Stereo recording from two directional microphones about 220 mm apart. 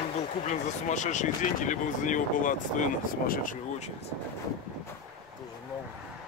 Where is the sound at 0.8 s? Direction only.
35° left (ahead or behind).